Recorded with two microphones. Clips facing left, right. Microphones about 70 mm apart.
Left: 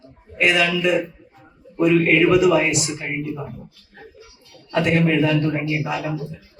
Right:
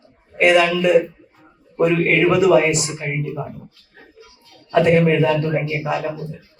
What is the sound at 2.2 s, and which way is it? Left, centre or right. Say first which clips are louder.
A man's voice: right 2 dB; right.